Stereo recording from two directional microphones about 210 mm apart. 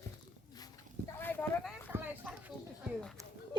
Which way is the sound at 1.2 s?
10° left (ahead or behind).